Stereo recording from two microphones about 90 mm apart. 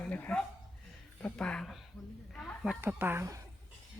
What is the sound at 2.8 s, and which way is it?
Speech, 25° right (ahead or behind).